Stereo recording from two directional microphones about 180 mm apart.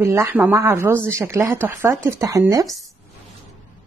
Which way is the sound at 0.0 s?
15° right (ahead or behind).